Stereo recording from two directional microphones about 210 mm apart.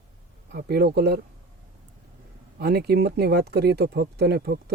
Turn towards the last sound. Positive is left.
turn(degrees=-50)  # may be behind; listen again after turning